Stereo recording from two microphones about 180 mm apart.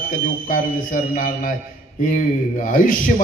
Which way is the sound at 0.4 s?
50° left (ahead or behind).